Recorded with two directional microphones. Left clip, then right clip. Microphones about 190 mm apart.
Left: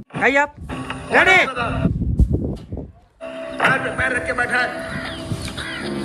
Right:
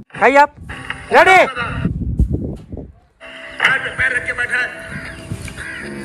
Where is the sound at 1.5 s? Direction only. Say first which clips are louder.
Even; 30° left (ahead or behind).